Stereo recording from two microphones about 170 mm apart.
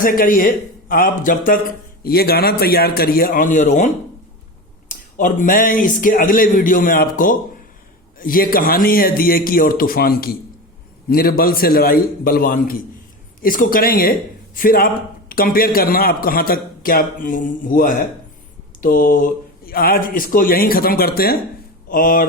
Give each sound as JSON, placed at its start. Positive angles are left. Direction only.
{"t": 0.0, "sound": "a man's voice", "side_deg": 55}
{"t": 2.0, "sound": "a man's voice", "side_deg": 65}